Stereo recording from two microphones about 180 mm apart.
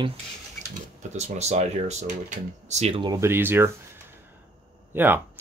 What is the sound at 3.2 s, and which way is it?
Speech, 10° right (ahead or behind).